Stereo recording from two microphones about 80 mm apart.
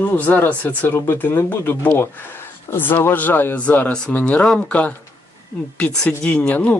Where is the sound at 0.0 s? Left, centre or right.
Left.